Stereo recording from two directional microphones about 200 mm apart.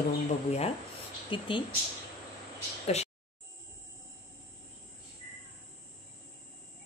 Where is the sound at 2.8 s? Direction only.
30° left (ahead or behind).